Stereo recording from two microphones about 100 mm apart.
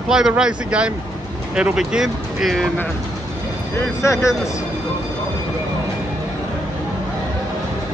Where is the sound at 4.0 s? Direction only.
30° left (ahead or behind).